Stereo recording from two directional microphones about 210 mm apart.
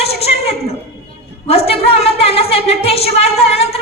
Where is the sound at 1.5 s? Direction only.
30° left (ahead or behind).